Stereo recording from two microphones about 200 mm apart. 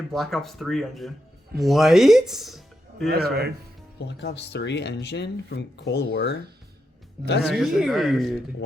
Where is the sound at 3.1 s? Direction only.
50° right (ahead or behind).